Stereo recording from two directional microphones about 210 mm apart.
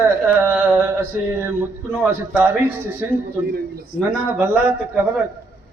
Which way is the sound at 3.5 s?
45° right (ahead or behind).